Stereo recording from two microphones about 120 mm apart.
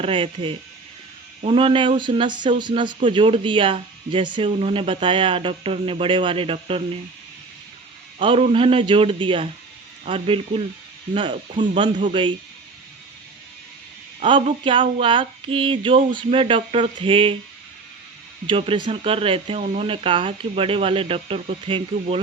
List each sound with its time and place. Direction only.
0.0 s speech: 45° right (ahead or behind)
8.2 s speech: 45° right (ahead or behind)
14.2 s speech: 50° right (ahead or behind)
18.4 s speech: 50° right (ahead or behind)